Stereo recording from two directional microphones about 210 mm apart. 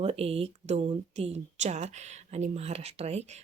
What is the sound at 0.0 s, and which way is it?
Speech, 30° right (ahead or behind).